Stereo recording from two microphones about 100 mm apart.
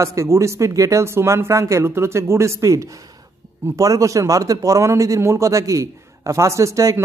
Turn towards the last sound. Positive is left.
turn(degrees=-30)  # may be behind; listen again after turning